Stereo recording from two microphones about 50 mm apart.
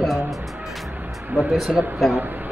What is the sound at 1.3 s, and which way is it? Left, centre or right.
Speech, right.